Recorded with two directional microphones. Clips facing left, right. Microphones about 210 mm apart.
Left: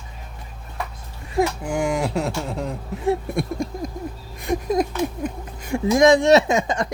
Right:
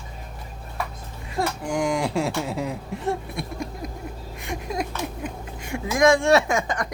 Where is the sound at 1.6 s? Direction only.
5° left (ahead or behind).